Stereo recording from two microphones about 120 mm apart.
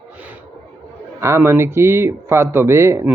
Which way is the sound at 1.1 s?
25° right (ahead or behind).